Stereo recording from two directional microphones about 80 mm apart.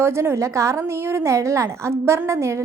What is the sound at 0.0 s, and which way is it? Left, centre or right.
A woman's voice, right.